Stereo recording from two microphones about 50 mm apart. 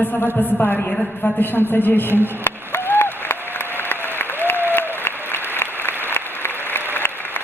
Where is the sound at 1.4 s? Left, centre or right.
Left.